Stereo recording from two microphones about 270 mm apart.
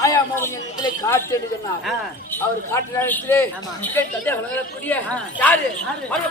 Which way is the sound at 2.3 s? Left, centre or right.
Centre.